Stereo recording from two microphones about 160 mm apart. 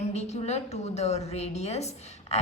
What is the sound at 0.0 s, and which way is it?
A woman's voice, 45° left (ahead or behind).